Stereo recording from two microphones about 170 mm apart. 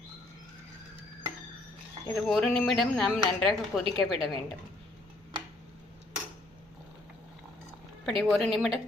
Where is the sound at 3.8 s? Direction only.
35° right (ahead or behind).